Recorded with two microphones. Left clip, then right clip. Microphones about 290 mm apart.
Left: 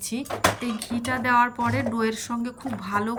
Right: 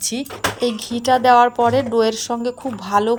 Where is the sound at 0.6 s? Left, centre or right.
Right.